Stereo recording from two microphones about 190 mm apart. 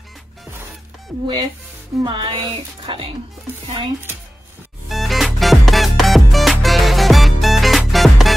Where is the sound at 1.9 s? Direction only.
25° right (ahead or behind).